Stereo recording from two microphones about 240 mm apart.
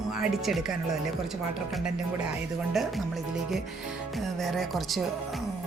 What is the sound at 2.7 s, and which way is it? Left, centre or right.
Speech, centre.